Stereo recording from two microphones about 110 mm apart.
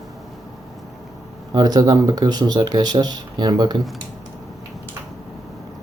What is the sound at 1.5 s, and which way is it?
Speech, 40° right (ahead or behind).